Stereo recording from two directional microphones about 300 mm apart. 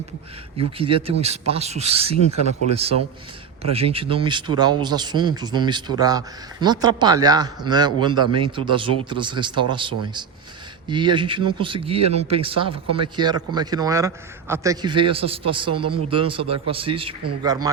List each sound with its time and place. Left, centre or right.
0.5 s speech: centre
3.6 s speech: centre